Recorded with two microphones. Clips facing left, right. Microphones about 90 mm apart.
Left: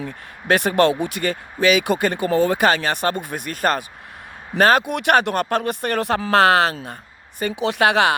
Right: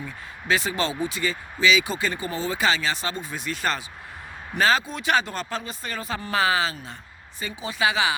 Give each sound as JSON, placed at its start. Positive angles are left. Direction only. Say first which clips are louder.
{"t": 0.0, "sound": "speech", "louder": "left 5 dB", "side_deg": 60}